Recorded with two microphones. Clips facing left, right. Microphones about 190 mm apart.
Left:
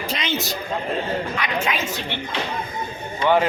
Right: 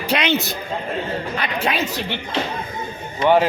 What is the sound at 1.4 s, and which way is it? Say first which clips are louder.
Speech: right 1 dB; 35° right (ahead or behind).